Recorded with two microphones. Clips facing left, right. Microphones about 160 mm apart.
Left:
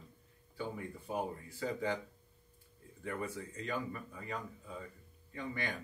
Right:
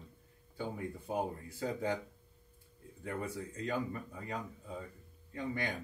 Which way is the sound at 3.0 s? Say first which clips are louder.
Right 1 dB; 40° right (ahead or behind).